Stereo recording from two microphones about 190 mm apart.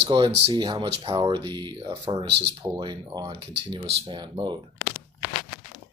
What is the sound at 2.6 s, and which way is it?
Speech, 25° right (ahead or behind).